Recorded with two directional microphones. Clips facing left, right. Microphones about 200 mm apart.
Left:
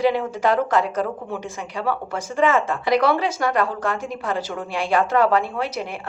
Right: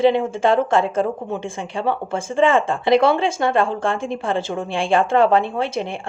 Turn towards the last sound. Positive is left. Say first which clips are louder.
# right 3 dB
turn(degrees=-25)  # may be behind; listen again after turning